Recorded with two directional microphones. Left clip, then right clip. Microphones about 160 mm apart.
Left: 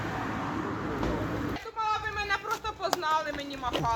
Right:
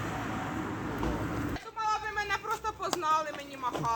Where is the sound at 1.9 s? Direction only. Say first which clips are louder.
Left 1 dB; 90° right.